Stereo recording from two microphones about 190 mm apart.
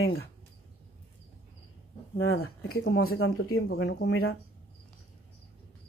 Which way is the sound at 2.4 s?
55° left (ahead or behind).